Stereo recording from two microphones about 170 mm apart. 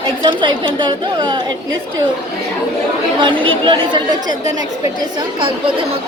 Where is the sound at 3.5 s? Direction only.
30° right (ahead or behind).